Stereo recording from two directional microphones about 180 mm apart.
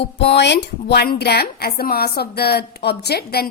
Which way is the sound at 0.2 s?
70° left (ahead or behind).